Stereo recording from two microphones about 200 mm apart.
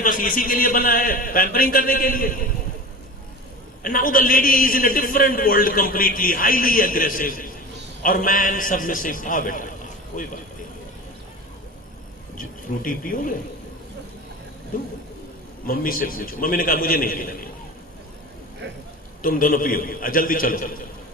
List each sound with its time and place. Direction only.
0.0 s a man's voice: 45° left (ahead or behind)
3.8 s a man's voice: 45° left (ahead or behind)
12.4 s a man's voice: 45° left (ahead or behind)
15.6 s a man's voice: 45° left (ahead or behind)
18.6 s a man's voice: 65° right (ahead or behind)
19.2 s a man's voice: 45° left (ahead or behind)